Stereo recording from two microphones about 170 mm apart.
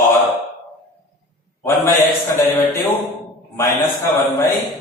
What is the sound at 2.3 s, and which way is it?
Speech, 15° left (ahead or behind).